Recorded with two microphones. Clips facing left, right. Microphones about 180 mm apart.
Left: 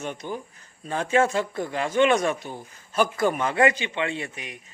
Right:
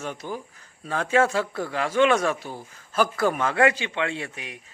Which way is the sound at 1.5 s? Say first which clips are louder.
Even; 20° left (ahead or behind).